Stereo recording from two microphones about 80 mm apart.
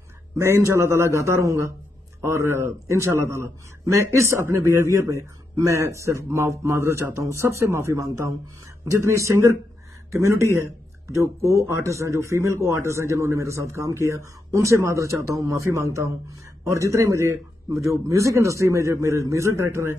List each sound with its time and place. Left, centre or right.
0.4 s a man's voice: right